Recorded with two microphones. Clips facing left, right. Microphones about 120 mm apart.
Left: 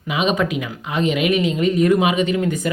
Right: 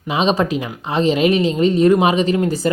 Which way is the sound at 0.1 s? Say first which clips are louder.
Right 3 dB; 30° right (ahead or behind).